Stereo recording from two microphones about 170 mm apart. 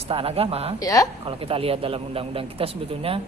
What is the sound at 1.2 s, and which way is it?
Speech, 35° right (ahead or behind).